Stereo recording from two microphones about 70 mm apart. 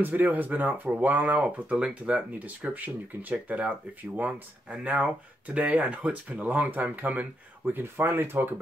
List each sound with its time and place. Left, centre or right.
0.0 s speech: right